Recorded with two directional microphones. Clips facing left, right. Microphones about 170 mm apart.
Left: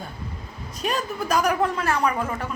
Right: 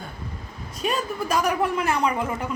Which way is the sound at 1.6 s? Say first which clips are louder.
Even; 15° right (ahead or behind).